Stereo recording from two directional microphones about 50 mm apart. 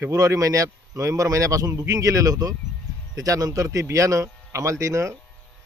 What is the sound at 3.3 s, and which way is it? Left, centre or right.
Speech, right.